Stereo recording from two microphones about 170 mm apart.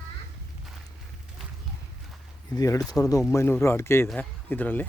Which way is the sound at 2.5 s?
20° left (ahead or behind).